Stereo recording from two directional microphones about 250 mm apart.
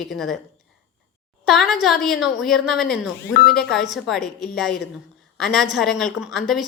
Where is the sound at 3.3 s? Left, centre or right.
Left.